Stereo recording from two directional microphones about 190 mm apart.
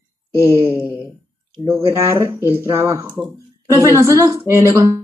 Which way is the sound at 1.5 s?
15° right (ahead or behind).